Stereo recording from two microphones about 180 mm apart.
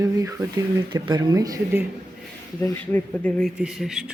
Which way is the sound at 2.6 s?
10° left (ahead or behind).